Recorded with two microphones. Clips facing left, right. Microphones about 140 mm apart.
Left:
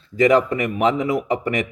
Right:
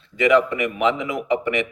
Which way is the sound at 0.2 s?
35° left (ahead or behind).